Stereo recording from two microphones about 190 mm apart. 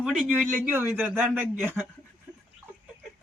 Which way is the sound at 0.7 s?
10° right (ahead or behind).